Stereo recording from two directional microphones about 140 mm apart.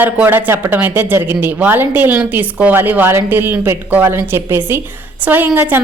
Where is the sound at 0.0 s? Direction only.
15° right (ahead or behind).